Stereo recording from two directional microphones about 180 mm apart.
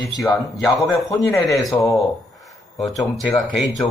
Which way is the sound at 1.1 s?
15° left (ahead or behind).